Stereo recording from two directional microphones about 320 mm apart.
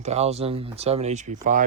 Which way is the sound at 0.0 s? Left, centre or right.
Centre.